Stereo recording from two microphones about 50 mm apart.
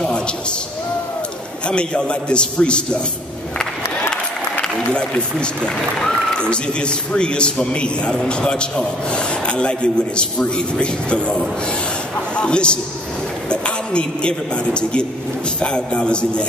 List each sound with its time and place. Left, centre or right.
1.7 s a man's voice: centre
4.1 s a sound: centre
6.3 s a man's voice: centre